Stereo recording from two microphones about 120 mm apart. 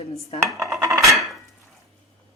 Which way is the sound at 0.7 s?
25° right (ahead or behind).